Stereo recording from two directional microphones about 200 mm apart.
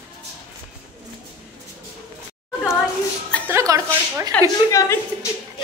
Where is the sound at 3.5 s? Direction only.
15° right (ahead or behind).